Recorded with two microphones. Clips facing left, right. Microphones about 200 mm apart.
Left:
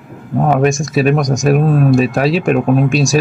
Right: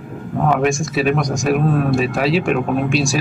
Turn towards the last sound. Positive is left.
turn(degrees=45)  # may be behind; listen again after turning